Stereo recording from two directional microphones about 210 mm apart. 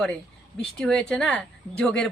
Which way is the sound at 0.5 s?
Centre (ahead or behind).